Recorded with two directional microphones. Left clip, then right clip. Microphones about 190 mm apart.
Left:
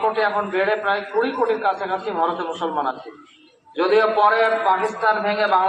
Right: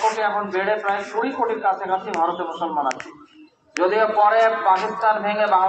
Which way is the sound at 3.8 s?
10° right (ahead or behind).